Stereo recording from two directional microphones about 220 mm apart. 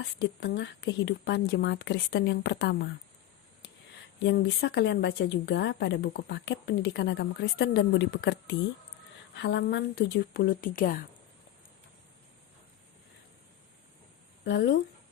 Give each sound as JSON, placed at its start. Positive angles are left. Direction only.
{"t": 0.0, "sound": "speech", "side_deg": 50}
{"t": 4.2, "sound": "speech", "side_deg": 50}
{"t": 14.4, "sound": "speech", "side_deg": 50}